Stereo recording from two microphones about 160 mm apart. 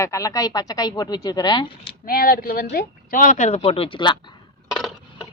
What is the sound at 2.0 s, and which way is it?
Speech, 65° left (ahead or behind).